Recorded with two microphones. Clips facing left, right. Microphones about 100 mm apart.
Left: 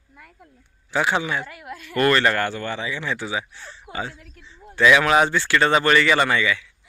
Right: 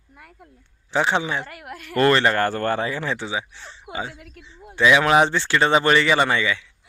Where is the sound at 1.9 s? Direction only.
25° right (ahead or behind).